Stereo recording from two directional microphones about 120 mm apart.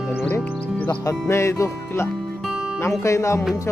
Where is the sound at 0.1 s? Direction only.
15° left (ahead or behind).